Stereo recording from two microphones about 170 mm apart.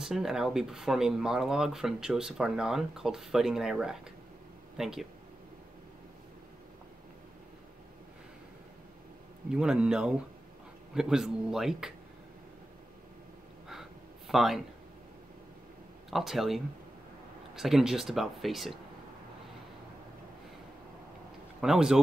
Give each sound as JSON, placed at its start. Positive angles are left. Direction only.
{"t": 0.0, "sound": "speech", "side_deg": -5}
{"t": 9.5, "sound": "speech", "side_deg": -5}
{"t": 13.7, "sound": "a sound", "side_deg": 0}
{"t": 16.1, "sound": "speech", "side_deg": 0}
{"t": 21.5, "sound": "speech", "side_deg": -5}